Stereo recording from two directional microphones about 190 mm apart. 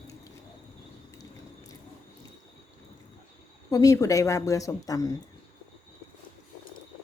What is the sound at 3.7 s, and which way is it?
A woman's voice, 20° left (ahead or behind).